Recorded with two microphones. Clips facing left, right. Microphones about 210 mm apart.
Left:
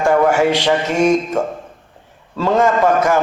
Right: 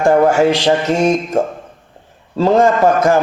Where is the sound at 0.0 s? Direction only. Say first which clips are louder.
Right 3 dB; 40° right (ahead or behind).